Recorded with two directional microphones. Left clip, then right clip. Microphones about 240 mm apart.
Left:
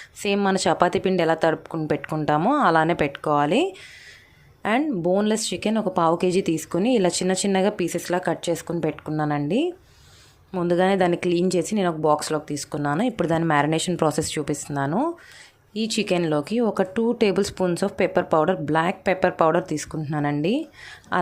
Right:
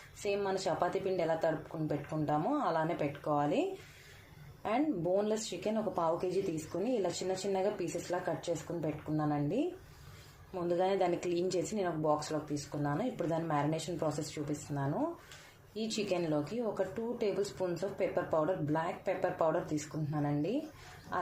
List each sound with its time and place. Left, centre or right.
0.2 s speech: left